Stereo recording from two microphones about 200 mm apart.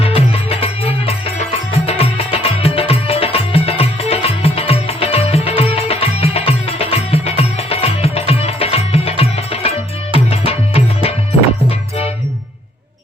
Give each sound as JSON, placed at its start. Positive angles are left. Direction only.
{"t": 0.0, "sound": "music", "side_deg": 30}